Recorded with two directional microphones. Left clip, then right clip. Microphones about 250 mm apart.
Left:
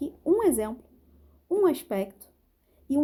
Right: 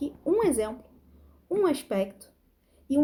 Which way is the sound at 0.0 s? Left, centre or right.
Left.